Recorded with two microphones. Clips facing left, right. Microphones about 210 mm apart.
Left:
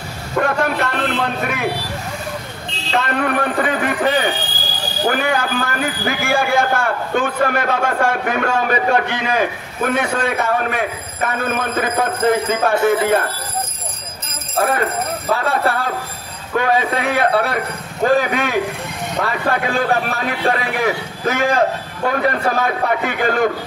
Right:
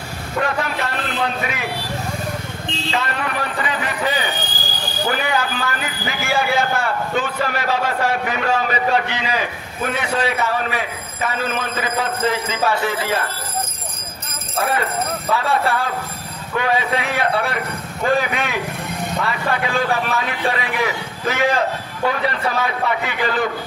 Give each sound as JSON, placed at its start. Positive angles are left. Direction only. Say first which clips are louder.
{"t": 0.4, "sound": "a man's voice", "louder": "left 4 dB", "side_deg": 55}
{"t": 2.9, "sound": "a man's voice", "louder": "left 6 dB", "side_deg": 55}
{"t": 14.6, "sound": "a man's voice", "louder": "left 3 dB", "side_deg": 45}
{"t": 19.6, "sound": "a man's voice", "louder": "left 2 dB", "side_deg": 50}